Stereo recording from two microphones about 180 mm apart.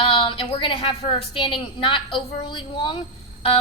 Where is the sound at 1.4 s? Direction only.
30° left (ahead or behind).